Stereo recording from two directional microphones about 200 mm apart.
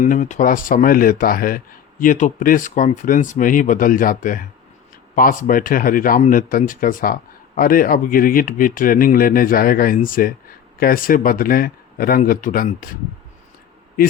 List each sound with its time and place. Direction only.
0.0 s speech: 40° left (ahead or behind)